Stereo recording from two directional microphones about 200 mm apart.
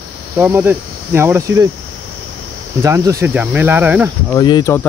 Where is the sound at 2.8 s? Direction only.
15° right (ahead or behind).